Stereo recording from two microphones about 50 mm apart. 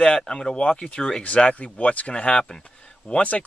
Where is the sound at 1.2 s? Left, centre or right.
Left.